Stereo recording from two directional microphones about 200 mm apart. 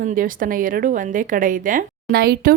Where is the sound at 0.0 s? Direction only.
40° right (ahead or behind).